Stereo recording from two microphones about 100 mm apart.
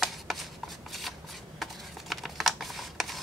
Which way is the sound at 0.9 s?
Centre (ahead or behind).